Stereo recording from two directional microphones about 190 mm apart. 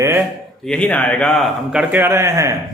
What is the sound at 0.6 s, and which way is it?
A man's voice, 5° left (ahead or behind).